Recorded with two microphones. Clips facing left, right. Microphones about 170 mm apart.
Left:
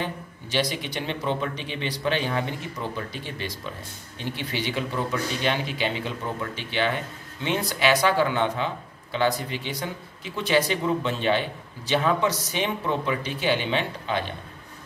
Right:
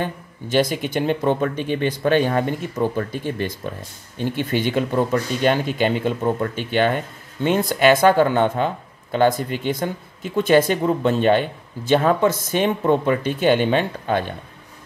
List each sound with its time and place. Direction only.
0.0 s speech: 50° right (ahead or behind)